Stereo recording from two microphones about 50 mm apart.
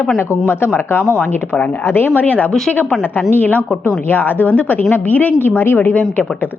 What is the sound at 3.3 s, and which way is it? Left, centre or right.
A woman's voice, left.